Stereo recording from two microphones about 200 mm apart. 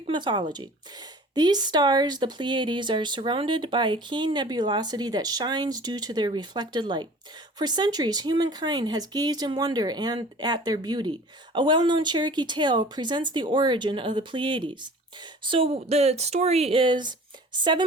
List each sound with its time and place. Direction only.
0.0 s speech: 25° right (ahead or behind)